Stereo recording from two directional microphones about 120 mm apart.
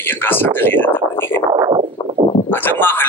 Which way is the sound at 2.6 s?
15° left (ahead or behind).